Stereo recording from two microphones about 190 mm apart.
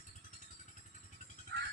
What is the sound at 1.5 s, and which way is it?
Music, 65° right (ahead or behind).